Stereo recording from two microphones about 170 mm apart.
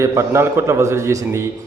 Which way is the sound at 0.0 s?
15° right (ahead or behind).